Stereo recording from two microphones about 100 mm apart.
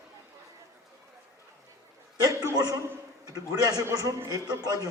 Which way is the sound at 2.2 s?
40° right (ahead or behind).